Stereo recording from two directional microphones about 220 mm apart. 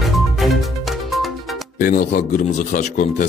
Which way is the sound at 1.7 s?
35° left (ahead or behind).